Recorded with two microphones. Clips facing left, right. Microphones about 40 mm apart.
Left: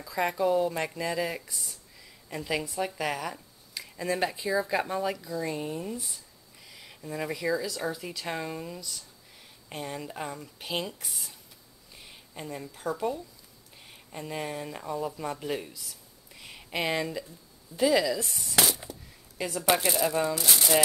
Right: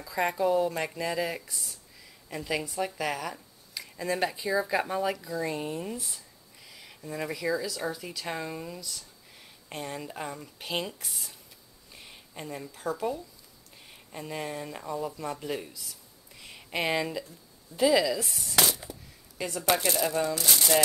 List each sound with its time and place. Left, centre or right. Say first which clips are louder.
0.0 s speech: even; centre
6.6 s speech: even; centre
16.3 s a sound: even; centre
17.7 s speech: right 1 dB; centre